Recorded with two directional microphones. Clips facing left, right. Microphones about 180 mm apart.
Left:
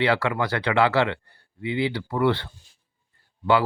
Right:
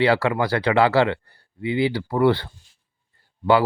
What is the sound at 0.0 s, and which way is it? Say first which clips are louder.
Speech: right 4 dB; 35° right (ahead or behind).